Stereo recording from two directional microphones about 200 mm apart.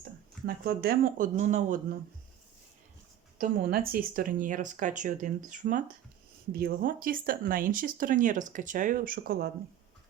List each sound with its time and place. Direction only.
0.4 s speech: 50° right (ahead or behind)
3.3 s speech: 45° right (ahead or behind)